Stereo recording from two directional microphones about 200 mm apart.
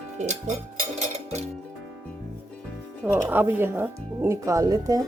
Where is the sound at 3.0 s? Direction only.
10° right (ahead or behind).